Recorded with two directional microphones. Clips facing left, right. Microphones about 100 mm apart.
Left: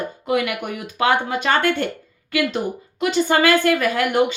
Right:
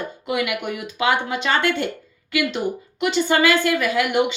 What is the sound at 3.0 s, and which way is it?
A woman's voice, 40° left (ahead or behind).